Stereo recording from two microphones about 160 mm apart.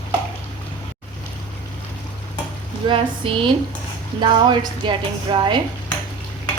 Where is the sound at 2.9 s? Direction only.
30° right (ahead or behind).